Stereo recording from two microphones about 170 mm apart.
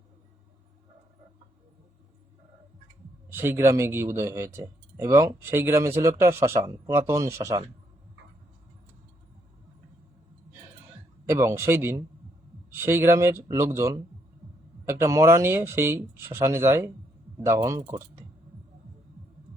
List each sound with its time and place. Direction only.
3.2 s speech: 15° right (ahead or behind)
11.3 s speech: 15° right (ahead or behind)